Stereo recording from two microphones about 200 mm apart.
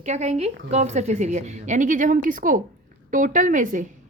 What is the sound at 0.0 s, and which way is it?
A woman's voice, 35° right (ahead or behind).